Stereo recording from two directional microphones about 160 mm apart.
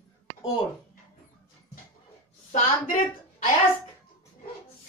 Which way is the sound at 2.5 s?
60° left (ahead or behind).